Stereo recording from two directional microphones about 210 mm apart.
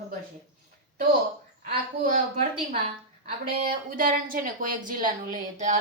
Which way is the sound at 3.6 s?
45° right (ahead or behind).